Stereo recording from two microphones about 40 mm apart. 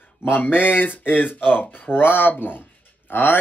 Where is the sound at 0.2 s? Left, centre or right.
Left.